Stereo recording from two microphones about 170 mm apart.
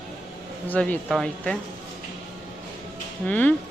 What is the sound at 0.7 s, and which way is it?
Speech, 10° left (ahead or behind).